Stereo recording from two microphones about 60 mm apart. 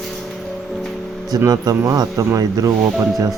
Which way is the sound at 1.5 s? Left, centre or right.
Right.